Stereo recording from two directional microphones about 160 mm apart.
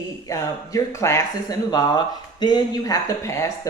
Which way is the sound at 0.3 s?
20° left (ahead or behind).